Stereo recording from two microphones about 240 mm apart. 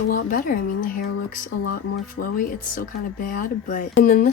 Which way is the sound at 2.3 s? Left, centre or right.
Left.